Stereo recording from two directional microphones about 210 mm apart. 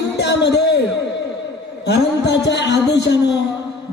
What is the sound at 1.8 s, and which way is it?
A man's voice, 55° left (ahead or behind).